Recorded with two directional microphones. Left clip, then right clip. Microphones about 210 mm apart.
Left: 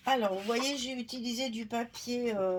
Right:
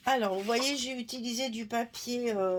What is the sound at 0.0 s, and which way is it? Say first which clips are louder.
Speech: right 1 dB; 40° right (ahead or behind).